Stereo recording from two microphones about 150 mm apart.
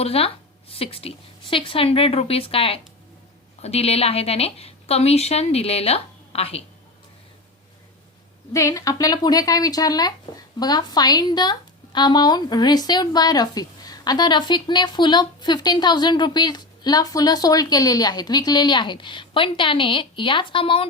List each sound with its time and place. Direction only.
0.0 s a woman's voice: 40° left (ahead or behind)
8.5 s speech: 20° left (ahead or behind); by 20.8 s 35° left (ahead or behind)